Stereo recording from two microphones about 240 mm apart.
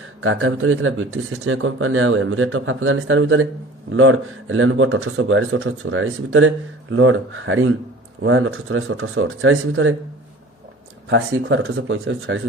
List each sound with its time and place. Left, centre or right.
0.2 s speech: right
11.1 s speech: right